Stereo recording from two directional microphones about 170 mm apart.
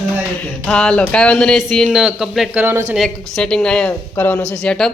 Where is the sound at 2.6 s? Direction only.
15° right (ahead or behind).